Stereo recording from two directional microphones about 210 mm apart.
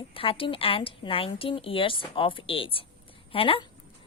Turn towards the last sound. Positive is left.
turn(degrees=25)  # may be behind; listen again after turning